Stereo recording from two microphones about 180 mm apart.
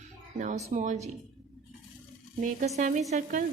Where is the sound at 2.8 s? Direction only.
40° right (ahead or behind).